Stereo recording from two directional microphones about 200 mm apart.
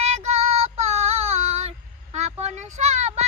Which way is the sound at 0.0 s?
35° right (ahead or behind).